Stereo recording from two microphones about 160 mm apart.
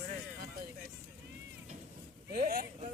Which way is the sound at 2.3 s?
60° right (ahead or behind).